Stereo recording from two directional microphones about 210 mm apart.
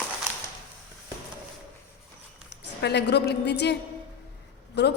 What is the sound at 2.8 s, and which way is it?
Speech, 55° left (ahead or behind).